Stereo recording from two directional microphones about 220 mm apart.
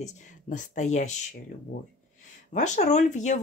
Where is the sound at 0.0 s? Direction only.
35° left (ahead or behind).